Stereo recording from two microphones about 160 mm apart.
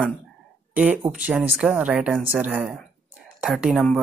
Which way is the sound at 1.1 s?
10° right (ahead or behind).